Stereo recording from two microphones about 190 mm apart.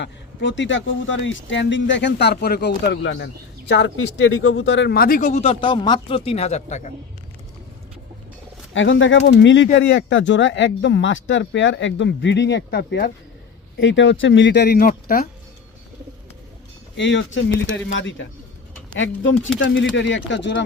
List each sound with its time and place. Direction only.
0.0 s speech: 70° left (ahead or behind); by 6.9 s 40° left (ahead or behind)
8.7 s speech: 85° left; by 13.1 s 60° left (ahead or behind)
13.7 s speech: 80° left; by 15.3 s 50° left (ahead or behind)
17.0 s speech: 75° left (ahead or behind)
18.9 s speech: 85° left; by 20.7 s 70° left (ahead or behind)